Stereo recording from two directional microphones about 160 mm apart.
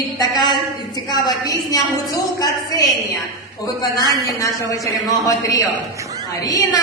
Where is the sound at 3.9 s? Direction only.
20° left (ahead or behind).